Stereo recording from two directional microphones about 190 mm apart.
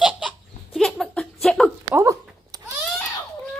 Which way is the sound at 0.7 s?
Centre (ahead or behind).